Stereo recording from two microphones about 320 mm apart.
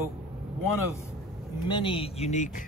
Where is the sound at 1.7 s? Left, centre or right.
Centre.